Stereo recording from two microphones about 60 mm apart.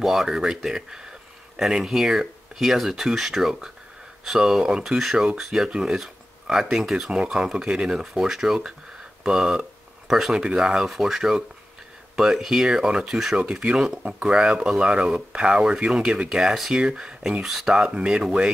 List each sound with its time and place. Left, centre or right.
0.0 s speech: centre
13.4 s speech: centre